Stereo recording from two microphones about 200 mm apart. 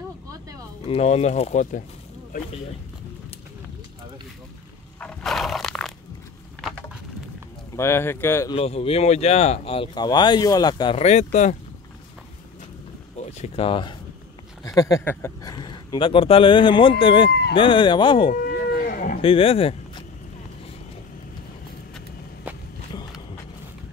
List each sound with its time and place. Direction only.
0.8 s speech: 30° left (ahead or behind)
5.0 s a sound: centre (ahead or behind)
7.7 s speech: 15° left (ahead or behind)
8.5 s speech: 30° left (ahead or behind)
13.2 s speech: 30° left (ahead or behind)
17.3 s speech: 55° left (ahead or behind)
17.6 s speech: 25° left (ahead or behind)
18.3 s livestock: 50° left (ahead or behind)
19.2 s speech: 30° left (ahead or behind)
21.9 s walk: 5° right (ahead or behind)